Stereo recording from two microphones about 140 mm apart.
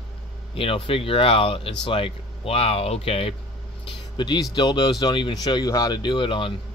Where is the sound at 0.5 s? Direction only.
40° left (ahead or behind).